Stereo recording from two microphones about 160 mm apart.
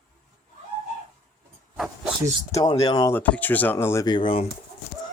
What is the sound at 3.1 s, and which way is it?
Speech, 10° left (ahead or behind).